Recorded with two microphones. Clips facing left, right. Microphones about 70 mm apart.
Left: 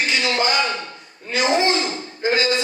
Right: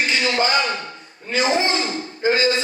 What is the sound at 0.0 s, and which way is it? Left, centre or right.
A man's voice, right.